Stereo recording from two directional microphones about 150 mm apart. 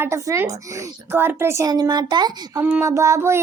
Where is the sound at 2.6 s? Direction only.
10° right (ahead or behind).